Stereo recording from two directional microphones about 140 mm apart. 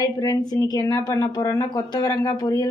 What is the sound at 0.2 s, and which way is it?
Speech, 30° left (ahead or behind).